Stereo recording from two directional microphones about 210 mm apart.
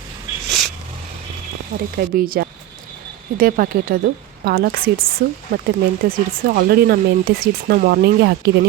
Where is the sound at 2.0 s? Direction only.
45° right (ahead or behind).